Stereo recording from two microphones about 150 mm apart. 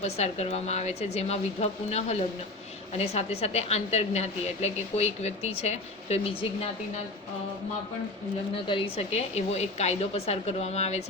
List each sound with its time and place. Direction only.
0.0 s a woman's voice: 45° left (ahead or behind)
8.5 s a woman's voice: 35° left (ahead or behind)